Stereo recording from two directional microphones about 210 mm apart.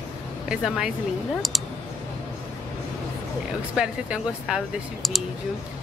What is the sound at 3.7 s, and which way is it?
Speech, 5° right (ahead or behind).